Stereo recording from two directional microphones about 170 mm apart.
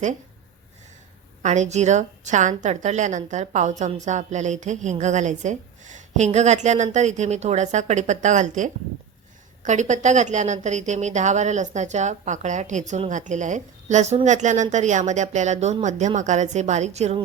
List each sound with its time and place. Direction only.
1.4 s a woman's voice: 45° right (ahead or behind)